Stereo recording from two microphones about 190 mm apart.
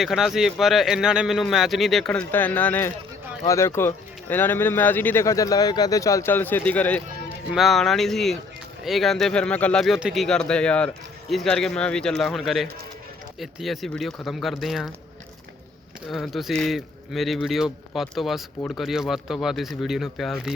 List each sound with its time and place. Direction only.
0.0 s speech: centre (ahead or behind)
16.0 s speech: centre (ahead or behind)